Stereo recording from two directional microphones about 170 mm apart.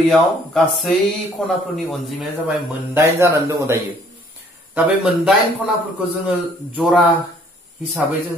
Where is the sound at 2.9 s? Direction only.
15° right (ahead or behind).